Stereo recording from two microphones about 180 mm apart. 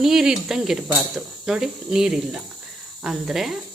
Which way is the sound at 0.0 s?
Centre (ahead or behind).